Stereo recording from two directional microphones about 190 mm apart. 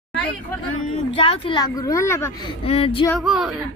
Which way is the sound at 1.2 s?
30° left (ahead or behind).